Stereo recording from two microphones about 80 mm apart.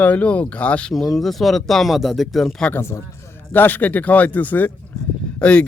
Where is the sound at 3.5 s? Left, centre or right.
Left.